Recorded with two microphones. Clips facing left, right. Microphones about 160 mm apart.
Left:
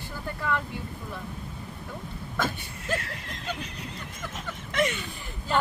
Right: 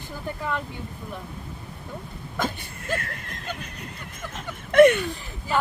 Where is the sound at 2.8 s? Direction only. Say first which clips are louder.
Right 1 dB; 55° right (ahead or behind).